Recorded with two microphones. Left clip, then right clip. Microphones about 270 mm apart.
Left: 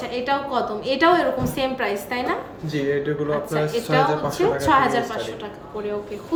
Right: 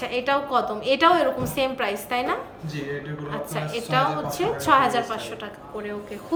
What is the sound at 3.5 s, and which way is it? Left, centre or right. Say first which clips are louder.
A woman's voice: left 1 dB; centre.